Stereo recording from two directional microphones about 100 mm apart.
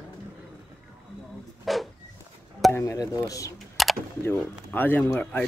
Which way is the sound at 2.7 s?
30° left (ahead or behind).